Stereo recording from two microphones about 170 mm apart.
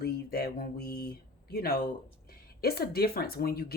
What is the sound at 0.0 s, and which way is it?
Speech, 65° left (ahead or behind).